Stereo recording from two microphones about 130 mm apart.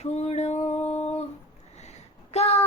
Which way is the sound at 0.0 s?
55° left (ahead or behind).